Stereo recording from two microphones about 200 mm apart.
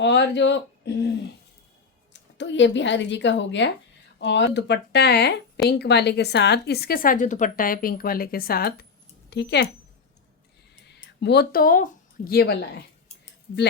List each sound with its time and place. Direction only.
0.0 s a woman's voice: 60° left (ahead or behind)
2.4 s a woman's voice: 65° left (ahead or behind)
10.8 s speech: 60° left (ahead or behind)